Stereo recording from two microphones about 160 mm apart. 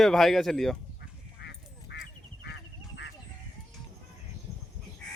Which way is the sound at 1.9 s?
90° left.